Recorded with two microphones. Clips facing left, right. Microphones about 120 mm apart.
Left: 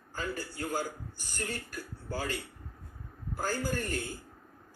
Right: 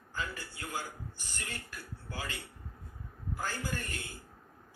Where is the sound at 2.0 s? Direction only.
40° left (ahead or behind).